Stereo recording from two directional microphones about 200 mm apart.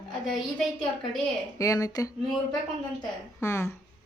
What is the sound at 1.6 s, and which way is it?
Speech, 15° left (ahead or behind).